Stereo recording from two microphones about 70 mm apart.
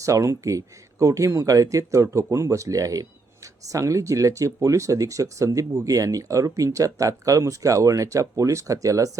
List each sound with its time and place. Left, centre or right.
0.0 s speech: right